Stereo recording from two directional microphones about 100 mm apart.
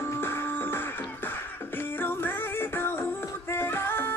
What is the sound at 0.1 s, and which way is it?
Music, 25° left (ahead or behind).